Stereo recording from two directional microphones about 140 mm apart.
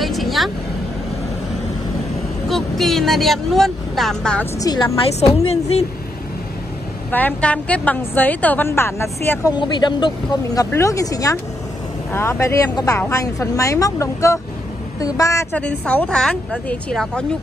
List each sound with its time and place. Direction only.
0.0 s vehicle: centre (ahead or behind)
2.4 s speech: centre (ahead or behind)
4.6 s speech: 25° left (ahead or behind)
5.5 s speech: 50° left (ahead or behind)
7.1 s a woman's voice: 10° left (ahead or behind)
9.6 s speech: 35° left (ahead or behind)
15.5 s a woman's voice: 10° left (ahead or behind)